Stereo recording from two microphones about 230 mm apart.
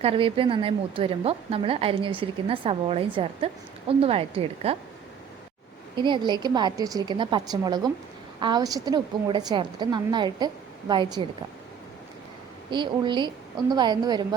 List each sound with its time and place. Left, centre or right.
0.0 s a woman's voice: right
6.0 s a woman's voice: centre
12.7 s a woman's voice: centre